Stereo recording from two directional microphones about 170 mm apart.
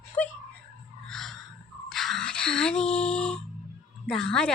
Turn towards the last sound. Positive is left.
turn(degrees=5)  # may be behind; listen again after turning